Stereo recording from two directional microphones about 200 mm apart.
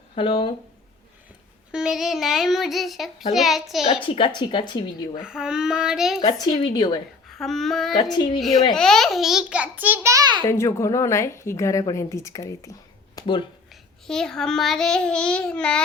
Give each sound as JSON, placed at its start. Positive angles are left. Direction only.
{"t": 0.2, "sound": "speech", "side_deg": 25}
{"t": 1.7, "sound": "a child's voice", "side_deg": 0}
{"t": 4.0, "sound": "speech", "side_deg": 25}
{"t": 5.2, "sound": "a child's voice", "side_deg": -5}
{"t": 6.1, "sound": "speech", "side_deg": 20}
{"t": 7.3, "sound": "child singing", "side_deg": 0}
{"t": 8.4, "sound": "a child's voice", "side_deg": 0}
{"t": 10.4, "sound": "a woman's voice", "side_deg": 15}
{"t": 13.1, "sound": "finger snapping", "side_deg": 25}
{"t": 14.1, "sound": "a child's voice", "side_deg": 5}